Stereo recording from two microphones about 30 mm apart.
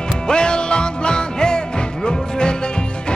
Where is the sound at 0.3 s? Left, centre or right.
Left.